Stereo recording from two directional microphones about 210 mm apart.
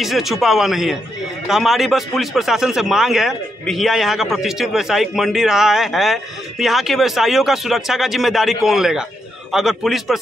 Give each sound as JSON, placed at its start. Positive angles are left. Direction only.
{"t": 0.0, "sound": "a man's voice", "side_deg": 0}